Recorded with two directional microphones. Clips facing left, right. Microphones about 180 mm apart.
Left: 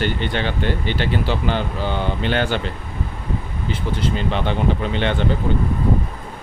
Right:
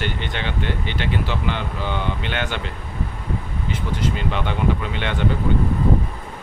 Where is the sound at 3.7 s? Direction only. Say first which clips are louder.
Left 2 dB; 30° left (ahead or behind).